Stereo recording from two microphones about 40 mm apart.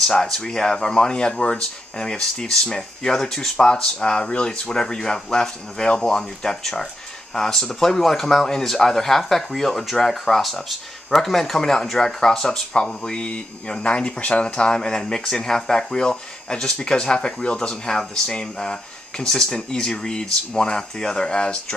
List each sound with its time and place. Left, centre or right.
0.0 s speech: centre; by 4.7 s left
4.7 s speech: centre